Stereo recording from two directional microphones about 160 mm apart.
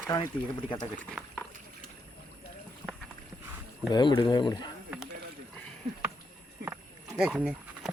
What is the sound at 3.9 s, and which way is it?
Speech, 30° left (ahead or behind).